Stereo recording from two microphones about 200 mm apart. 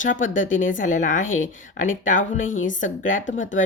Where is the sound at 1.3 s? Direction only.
80° left.